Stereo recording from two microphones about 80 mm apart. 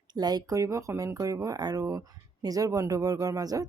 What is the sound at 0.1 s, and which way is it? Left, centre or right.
Speech, right.